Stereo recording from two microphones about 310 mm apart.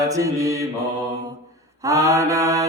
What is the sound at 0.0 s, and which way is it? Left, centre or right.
Mantra, centre.